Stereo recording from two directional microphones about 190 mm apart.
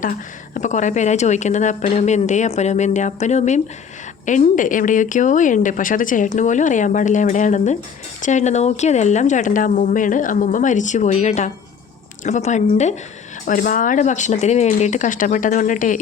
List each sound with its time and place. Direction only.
0.0 s a woman's voice: 45° left (ahead or behind)